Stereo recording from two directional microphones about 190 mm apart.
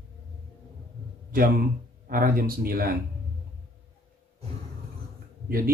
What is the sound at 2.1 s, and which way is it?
Speech, 50° right (ahead or behind).